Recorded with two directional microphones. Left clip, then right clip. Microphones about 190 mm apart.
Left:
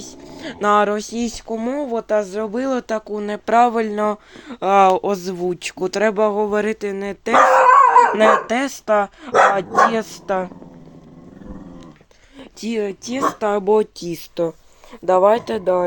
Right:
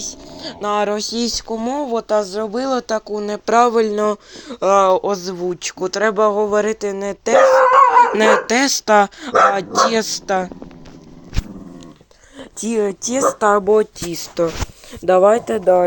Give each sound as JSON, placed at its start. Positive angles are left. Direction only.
{"t": 0.3, "sound": "speech", "side_deg": 35}
{"t": 0.9, "sound": "speech", "side_deg": 15}
{"t": 4.8, "sound": "speech", "side_deg": 35}
{"t": 8.1, "sound": "speech", "side_deg": 0}
{"t": 12.6, "sound": "speech", "side_deg": -5}
{"t": 13.7, "sound": "speech", "side_deg": 15}
{"t": 15.0, "sound": "speech", "side_deg": -15}
{"t": 15.4, "sound": "speech", "side_deg": 0}